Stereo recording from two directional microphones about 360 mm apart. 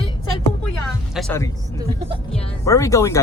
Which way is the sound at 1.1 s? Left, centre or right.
Centre.